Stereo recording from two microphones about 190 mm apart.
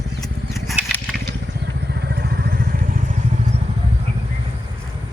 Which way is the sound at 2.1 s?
55° right (ahead or behind).